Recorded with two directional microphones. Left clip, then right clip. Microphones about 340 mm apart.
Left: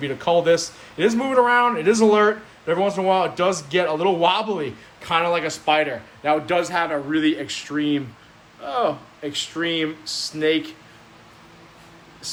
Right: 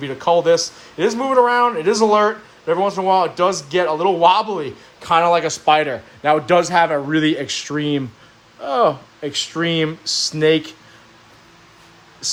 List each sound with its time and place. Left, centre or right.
0.0 s a man's voice: centre
12.2 s speech: centre